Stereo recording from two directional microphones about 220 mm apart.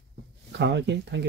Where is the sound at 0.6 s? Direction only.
50° right (ahead or behind).